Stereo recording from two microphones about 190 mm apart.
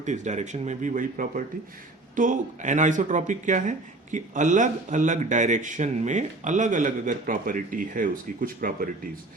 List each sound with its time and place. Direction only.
0.0 s speech: 40° right (ahead or behind)